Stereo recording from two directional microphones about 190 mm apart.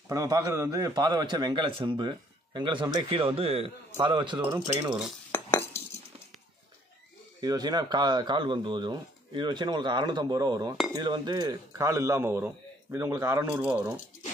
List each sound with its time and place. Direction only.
0.1 s a man's voice: 20° right (ahead or behind)
5.3 s cutlery: 15° left (ahead or behind)
7.3 s a man's voice: 20° right (ahead or behind)